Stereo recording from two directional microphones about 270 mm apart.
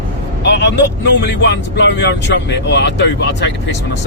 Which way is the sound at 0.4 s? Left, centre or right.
Left.